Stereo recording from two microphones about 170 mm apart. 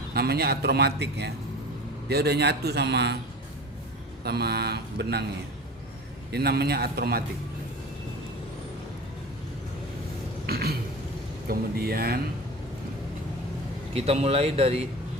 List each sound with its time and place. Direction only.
0.1 s a man's voice: 65° right (ahead or behind)
4.2 s a man's voice: 70° right (ahead or behind)
6.3 s a man's voice: 70° right (ahead or behind)
10.4 s a sound: 65° right (ahead or behind)
11.4 s speech: 60° right (ahead or behind)
13.9 s speech: 40° right (ahead or behind)